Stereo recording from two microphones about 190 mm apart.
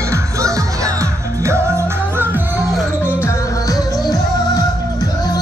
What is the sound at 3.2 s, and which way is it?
Music, 15° left (ahead or behind).